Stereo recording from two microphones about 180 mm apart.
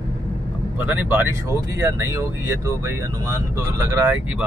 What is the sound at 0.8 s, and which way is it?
Speech, 10° right (ahead or behind).